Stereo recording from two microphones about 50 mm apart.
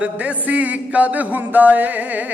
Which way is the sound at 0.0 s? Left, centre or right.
Right.